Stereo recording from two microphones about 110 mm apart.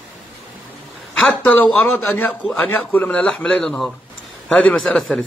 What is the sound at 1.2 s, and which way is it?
Speech, 10° left (ahead or behind).